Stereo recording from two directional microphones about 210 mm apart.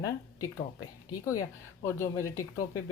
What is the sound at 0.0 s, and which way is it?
Speech, 15° left (ahead or behind).